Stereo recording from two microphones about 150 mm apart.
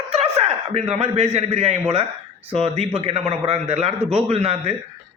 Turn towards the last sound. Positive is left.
turn(degrees=-45)  # may be behind; listen again after turning